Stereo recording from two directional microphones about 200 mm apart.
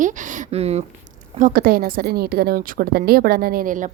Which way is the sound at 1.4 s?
40° right (ahead or behind).